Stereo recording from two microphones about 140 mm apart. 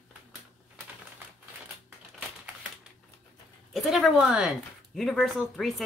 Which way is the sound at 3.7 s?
Centre (ahead or behind).